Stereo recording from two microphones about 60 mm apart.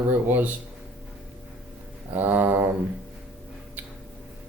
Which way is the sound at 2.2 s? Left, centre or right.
Right.